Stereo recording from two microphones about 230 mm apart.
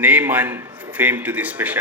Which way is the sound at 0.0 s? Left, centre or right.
Centre.